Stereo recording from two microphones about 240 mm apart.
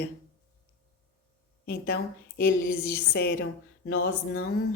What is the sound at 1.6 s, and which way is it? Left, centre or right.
A woman's voice, left.